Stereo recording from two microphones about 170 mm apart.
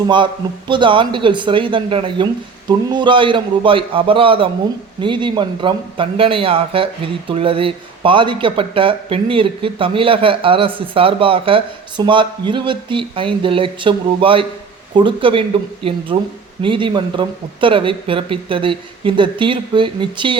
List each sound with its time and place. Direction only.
0.7 s speech: 30° right (ahead or behind)